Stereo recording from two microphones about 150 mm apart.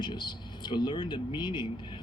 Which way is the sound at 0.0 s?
30° left (ahead or behind).